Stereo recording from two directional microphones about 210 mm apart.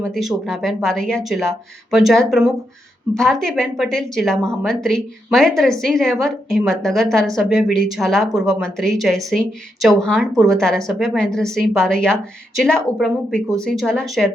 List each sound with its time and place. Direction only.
0.0 s a woman's voice: centre (ahead or behind)
10.3 s a woman's voice: 15° right (ahead or behind)
10.6 s a woman's voice: centre (ahead or behind)